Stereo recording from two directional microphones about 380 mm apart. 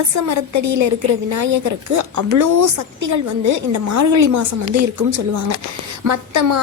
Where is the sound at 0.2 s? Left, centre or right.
Right.